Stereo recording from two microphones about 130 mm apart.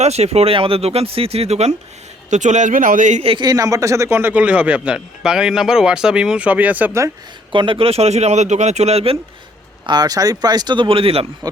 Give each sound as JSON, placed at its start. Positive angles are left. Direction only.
{"t": 0.0, "sound": "speech", "side_deg": -55}
{"t": 2.3, "sound": "speech", "side_deg": -65}
{"t": 3.2, "sound": "a man's voice", "side_deg": -35}
{"t": 7.5, "sound": "speech", "side_deg": -40}
{"t": 9.8, "sound": "speech", "side_deg": -30}